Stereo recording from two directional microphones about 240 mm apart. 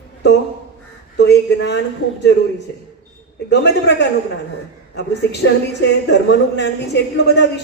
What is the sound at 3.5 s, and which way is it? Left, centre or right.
A woman's voice, left.